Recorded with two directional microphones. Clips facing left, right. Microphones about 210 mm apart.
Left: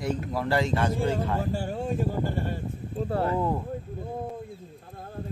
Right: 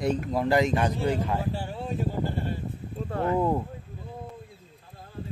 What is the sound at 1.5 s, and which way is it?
Speech, 45° left (ahead or behind).